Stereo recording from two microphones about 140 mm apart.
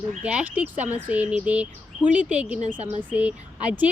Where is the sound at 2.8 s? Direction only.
50° right (ahead or behind).